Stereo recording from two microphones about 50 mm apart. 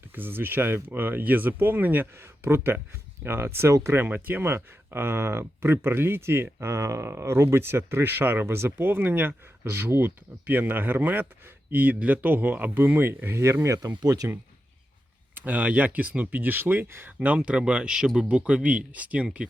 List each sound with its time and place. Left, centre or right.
0.1 s speech: right
2.1 s speech: right
4.0 s speech: right
8.0 s speech: right
8.4 s speech: right
14.2 s speech: right
15.4 s speech: right
16.4 s speech: right
17.2 s speech: right